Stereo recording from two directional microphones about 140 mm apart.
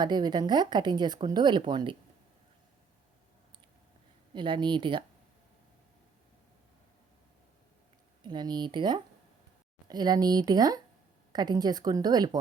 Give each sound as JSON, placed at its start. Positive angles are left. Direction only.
{"t": 0.0, "sound": "speech", "side_deg": -30}
{"t": 4.4, "sound": "speech", "side_deg": -35}
{"t": 8.2, "sound": "a woman's voice", "side_deg": -30}